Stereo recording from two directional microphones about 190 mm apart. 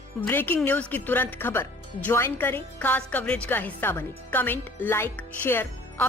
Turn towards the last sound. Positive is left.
turn(degrees=10)  # may be behind; listen again after turning